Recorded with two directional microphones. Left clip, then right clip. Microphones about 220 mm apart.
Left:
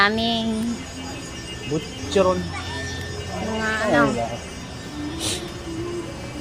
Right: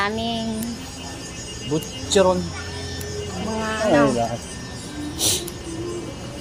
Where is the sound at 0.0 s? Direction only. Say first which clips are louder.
Left 4 dB; 20° left (ahead or behind).